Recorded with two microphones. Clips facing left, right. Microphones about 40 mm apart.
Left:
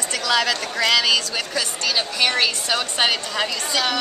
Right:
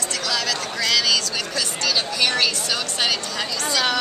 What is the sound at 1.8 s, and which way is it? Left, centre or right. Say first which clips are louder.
A woman's voice: even; centre.